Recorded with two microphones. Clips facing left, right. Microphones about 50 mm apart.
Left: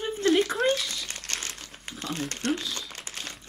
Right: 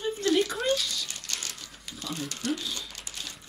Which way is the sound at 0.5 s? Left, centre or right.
Centre.